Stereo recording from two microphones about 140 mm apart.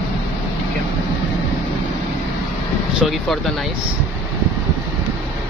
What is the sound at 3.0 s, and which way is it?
Speech, centre (ahead or behind).